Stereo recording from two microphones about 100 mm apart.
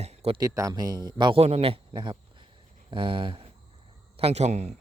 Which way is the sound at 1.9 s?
50° right (ahead or behind).